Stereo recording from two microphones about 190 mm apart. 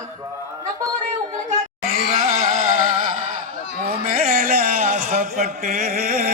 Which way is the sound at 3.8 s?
45° right (ahead or behind).